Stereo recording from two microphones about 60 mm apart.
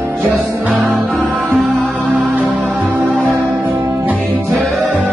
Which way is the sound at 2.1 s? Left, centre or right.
Right.